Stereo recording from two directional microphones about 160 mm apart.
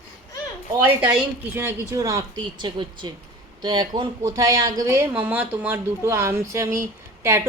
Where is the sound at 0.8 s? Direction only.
10° right (ahead or behind).